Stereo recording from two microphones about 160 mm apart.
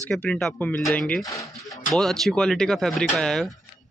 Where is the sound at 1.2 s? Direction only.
20° left (ahead or behind).